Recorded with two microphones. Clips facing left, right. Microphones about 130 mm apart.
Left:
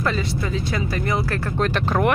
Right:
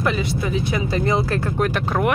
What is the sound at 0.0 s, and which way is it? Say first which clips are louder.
Speech: right 2 dB; 15° right (ahead or behind).